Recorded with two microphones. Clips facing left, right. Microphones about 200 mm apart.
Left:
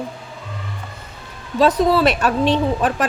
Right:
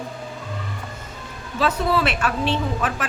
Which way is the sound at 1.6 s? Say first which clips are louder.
Left 6 dB; 35° left (ahead or behind).